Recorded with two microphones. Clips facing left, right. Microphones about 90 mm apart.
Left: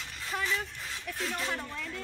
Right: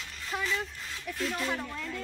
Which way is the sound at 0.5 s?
5° right (ahead or behind).